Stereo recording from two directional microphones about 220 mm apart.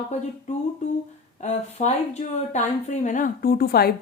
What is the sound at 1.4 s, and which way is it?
A woman's voice, 30° left (ahead or behind).